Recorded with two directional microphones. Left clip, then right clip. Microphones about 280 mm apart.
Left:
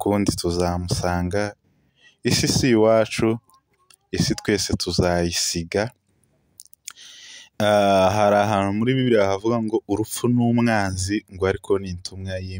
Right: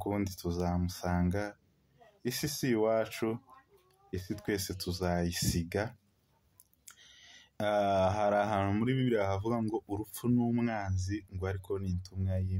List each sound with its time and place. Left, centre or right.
0.0 s speech: left